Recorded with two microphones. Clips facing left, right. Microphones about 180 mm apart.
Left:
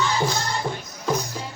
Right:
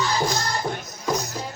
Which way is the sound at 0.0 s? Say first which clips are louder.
Even; 40° right (ahead or behind).